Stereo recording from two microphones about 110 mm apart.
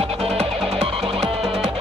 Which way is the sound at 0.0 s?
70° right (ahead or behind).